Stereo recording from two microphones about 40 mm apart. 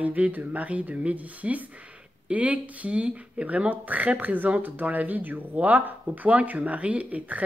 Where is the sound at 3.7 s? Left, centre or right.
Right.